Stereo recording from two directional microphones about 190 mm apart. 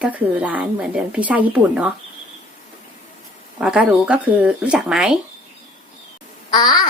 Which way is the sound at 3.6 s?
5° right (ahead or behind).